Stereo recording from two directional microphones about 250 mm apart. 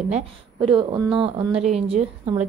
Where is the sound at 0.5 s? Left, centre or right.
Centre.